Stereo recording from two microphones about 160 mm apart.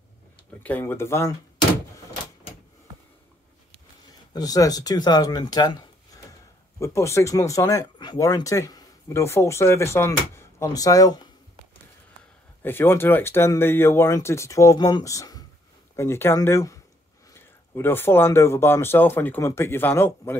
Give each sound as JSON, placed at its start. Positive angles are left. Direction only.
{"t": 0.6, "sound": "speech", "side_deg": 10}
{"t": 4.3, "sound": "speech", "side_deg": 25}
{"t": 12.6, "sound": "speech", "side_deg": 15}